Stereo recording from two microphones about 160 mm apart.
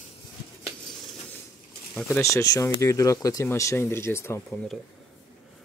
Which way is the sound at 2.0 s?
20° left (ahead or behind).